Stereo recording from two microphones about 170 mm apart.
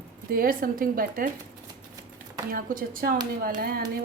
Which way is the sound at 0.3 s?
60° right (ahead or behind).